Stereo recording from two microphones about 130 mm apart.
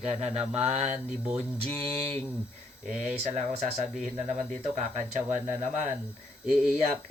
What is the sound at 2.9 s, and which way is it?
Speech, 65° right (ahead or behind).